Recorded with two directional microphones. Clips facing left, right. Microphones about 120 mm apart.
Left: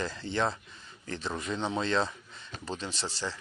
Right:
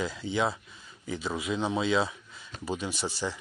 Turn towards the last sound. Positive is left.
turn(degrees=-15)  # may be behind; listen again after turning